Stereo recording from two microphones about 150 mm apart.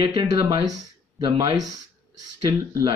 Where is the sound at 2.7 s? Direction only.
20° right (ahead or behind).